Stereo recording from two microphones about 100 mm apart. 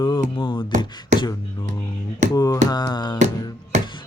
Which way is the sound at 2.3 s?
40° left (ahead or behind).